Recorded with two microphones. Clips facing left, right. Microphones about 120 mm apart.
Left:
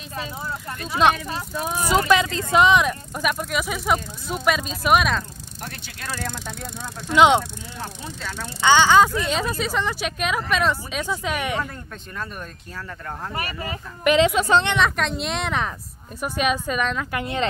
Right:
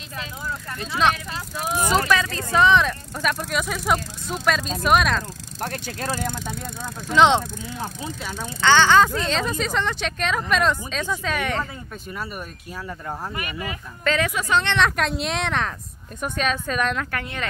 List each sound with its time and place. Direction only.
1.9 s speech: 20° left (ahead or behind); by 5.2 s centre (ahead or behind)
5.6 s speech: 40° right (ahead or behind)
6.1 s speech: 15° right (ahead or behind)
7.2 s speech: 10° left (ahead or behind)
7.8 s speech: 15° right (ahead or behind)
8.5 s speech: 10° left (ahead or behind)
13.3 s speech: 35° left (ahead or behind)
14.0 s a woman's voice: 20° left (ahead or behind)
14.7 s speech: centre (ahead or behind)
17.1 s a woman's voice: 20° left (ahead or behind)